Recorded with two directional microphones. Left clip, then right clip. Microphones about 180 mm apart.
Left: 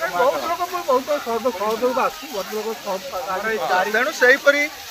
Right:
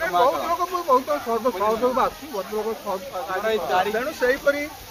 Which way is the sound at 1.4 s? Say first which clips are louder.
Right 1 dB; 10° right (ahead or behind).